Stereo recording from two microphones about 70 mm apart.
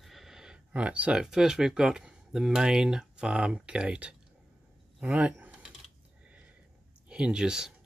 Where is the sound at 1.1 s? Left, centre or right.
Centre.